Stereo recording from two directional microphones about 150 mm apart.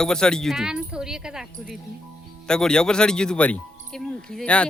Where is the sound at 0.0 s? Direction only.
5° left (ahead or behind).